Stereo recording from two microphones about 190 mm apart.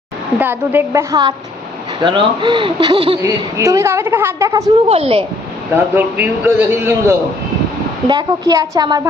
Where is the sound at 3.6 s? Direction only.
15° right (ahead or behind).